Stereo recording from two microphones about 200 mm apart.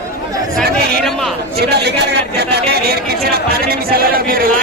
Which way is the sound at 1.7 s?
55° right (ahead or behind).